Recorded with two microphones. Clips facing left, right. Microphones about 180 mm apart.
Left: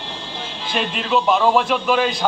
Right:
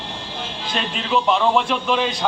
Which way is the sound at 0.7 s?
5° left (ahead or behind).